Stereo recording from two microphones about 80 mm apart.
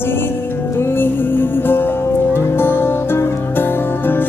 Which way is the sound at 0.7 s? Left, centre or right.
Left.